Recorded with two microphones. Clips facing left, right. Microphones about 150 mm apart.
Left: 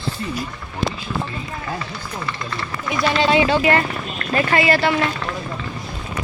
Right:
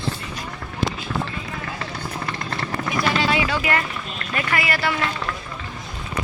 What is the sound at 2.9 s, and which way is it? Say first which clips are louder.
Speech: left 5 dB; 25° left (ahead or behind).